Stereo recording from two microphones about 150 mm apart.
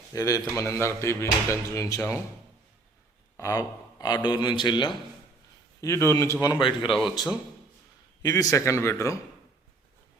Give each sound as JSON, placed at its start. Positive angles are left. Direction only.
{"t": 0.1, "sound": "speech", "side_deg": 20}
{"t": 3.3, "sound": "speech", "side_deg": 20}
{"t": 5.8, "sound": "speech", "side_deg": 20}
{"t": 8.2, "sound": "speech", "side_deg": 20}